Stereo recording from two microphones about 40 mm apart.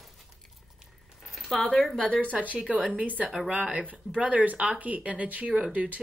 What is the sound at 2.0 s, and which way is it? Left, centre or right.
Speech, left.